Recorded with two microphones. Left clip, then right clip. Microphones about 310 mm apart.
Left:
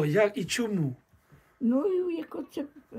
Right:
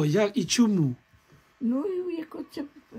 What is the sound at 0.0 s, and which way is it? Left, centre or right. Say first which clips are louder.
Speech: even; centre.